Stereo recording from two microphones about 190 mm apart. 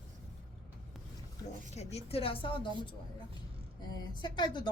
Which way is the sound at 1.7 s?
35° left (ahead or behind).